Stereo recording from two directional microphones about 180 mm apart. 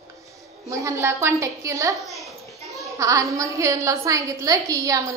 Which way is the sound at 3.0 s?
20° right (ahead or behind).